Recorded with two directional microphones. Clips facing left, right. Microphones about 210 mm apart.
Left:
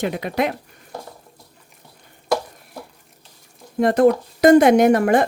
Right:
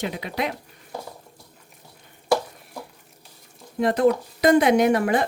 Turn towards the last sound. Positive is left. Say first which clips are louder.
# left 5 dB
turn(degrees=45)  # may be behind; listen again after turning